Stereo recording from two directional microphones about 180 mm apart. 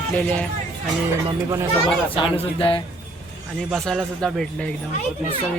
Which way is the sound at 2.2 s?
30° left (ahead or behind).